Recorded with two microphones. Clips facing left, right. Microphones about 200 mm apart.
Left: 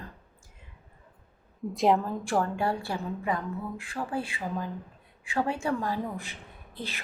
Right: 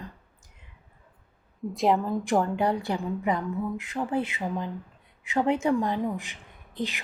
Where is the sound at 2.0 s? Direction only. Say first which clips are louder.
Right 3 dB; 15° right (ahead or behind).